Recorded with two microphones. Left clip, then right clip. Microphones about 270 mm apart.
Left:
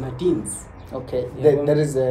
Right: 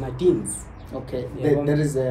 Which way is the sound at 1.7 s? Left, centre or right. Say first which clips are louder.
Left 4 dB; centre.